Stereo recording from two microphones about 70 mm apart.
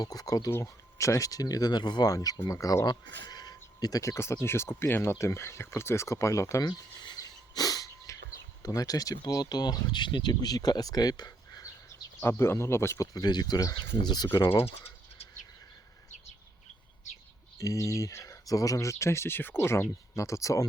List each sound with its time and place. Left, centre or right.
0.0 s speech: left
0.6 s speech: left
2.1 s speech: left
2.5 s speech: left
2.8 s speech: left
4.0 s speech: left
6.6 s a sound: left
8.6 s speech: left
12.2 s speech: left
13.1 s speech: left
14.4 s speech: left
17.6 s speech: left